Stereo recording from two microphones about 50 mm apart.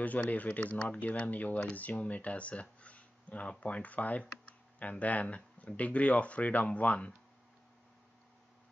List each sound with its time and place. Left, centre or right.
0.0 s speech: left